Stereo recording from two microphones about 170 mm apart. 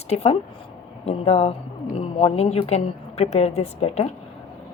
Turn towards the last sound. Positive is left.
turn(degrees=35)  # may be behind; listen again after turning